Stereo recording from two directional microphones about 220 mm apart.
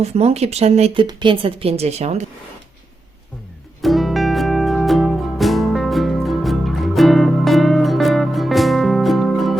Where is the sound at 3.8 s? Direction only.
Centre (ahead or behind).